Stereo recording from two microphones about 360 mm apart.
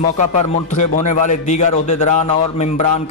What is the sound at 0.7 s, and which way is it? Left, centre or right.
Speech, centre.